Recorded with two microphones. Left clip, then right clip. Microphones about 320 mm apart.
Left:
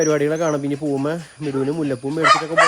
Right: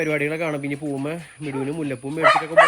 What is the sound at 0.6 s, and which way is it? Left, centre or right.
Speech, centre.